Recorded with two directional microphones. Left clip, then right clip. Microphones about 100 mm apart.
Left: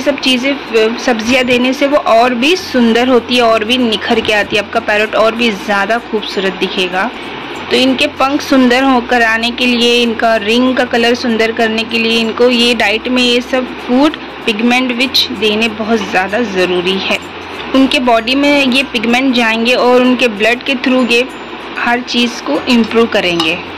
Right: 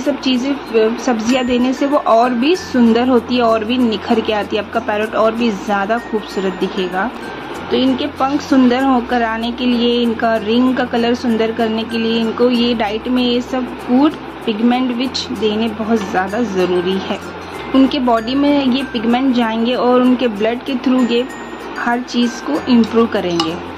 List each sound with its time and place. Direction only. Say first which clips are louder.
0.0 s speech: left 5 dB; 35° right (ahead or behind); by 9.4 s 15° right (ahead or behind)
9.4 s speech: left 6 dB; 25° right (ahead or behind)